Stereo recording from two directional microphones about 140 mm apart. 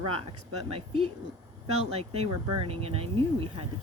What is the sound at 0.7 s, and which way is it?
Speech, 40° right (ahead or behind).